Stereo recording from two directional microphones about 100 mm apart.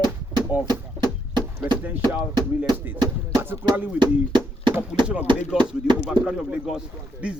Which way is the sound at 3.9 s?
50° right (ahead or behind).